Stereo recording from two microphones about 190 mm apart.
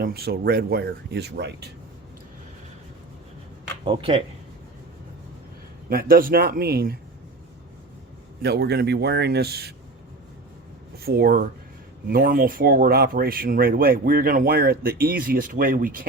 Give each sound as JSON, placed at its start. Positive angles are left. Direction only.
{"t": 0.0, "sound": "speech", "side_deg": -55}
{"t": 3.8, "sound": "speech", "side_deg": -25}
{"t": 5.9, "sound": "speech", "side_deg": -50}
{"t": 8.4, "sound": "speech", "side_deg": -60}
{"t": 11.0, "sound": "speech", "side_deg": -55}